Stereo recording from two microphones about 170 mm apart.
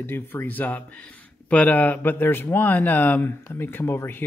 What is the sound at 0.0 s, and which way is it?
Speech, 15° left (ahead or behind).